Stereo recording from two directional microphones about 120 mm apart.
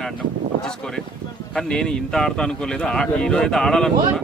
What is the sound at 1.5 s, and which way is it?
A man's voice, 5° left (ahead or behind).